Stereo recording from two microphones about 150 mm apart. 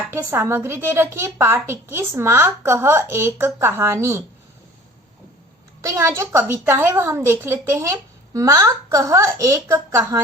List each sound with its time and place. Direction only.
0.1 s a woman's voice: 15° right (ahead or behind)
5.8 s a woman's voice: 20° right (ahead or behind)